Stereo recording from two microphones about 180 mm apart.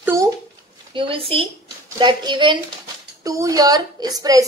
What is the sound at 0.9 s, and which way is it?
A woman's voice, 30° right (ahead or behind).